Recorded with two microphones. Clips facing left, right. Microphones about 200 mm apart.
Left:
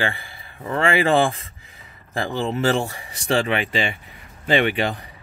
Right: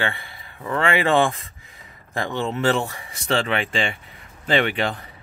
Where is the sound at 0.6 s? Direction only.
30° left (ahead or behind).